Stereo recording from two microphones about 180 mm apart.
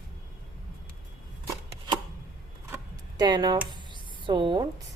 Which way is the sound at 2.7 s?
20° right (ahead or behind).